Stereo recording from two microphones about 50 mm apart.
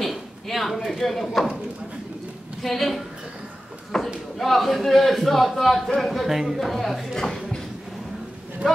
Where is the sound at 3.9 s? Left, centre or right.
Centre.